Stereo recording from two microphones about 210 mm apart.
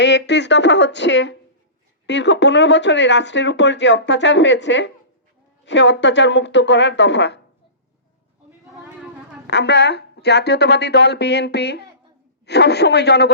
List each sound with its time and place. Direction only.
0.0 s speech: 55° left (ahead or behind)
9.5 s speech: 55° left (ahead or behind)